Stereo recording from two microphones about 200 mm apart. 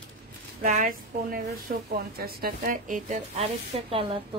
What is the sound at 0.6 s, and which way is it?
A woman's voice, 40° right (ahead or behind).